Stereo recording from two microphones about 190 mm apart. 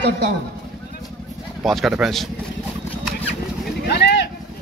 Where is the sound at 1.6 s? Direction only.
Centre (ahead or behind).